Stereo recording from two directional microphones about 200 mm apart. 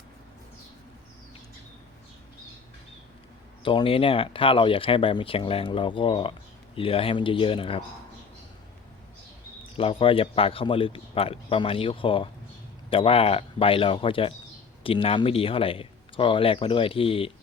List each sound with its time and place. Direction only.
3.6 s speech: 25° left (ahead or behind)
9.7 s speech: 25° left (ahead or behind)